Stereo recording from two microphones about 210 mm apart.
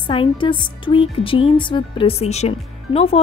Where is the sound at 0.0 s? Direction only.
25° left (ahead or behind).